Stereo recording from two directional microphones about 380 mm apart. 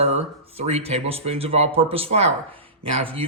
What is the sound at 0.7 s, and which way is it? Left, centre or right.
Speech, centre.